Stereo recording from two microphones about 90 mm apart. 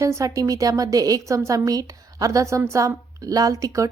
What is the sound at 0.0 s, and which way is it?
A woman's voice, 35° right (ahead or behind).